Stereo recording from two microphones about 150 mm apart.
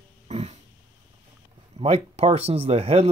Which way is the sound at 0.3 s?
45° right (ahead or behind).